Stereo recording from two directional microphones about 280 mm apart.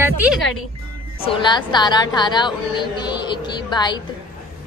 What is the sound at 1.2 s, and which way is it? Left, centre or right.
A woman's voice, centre.